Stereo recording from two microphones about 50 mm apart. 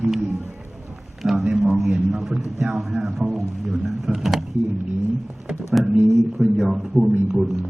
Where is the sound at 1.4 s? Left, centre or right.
Centre.